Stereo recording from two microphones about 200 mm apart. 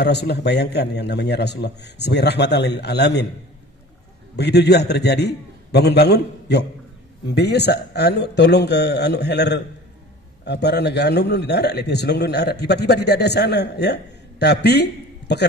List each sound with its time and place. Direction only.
0.0 s a man's voice: 55° left (ahead or behind)
4.4 s a man's voice: 55° left (ahead or behind)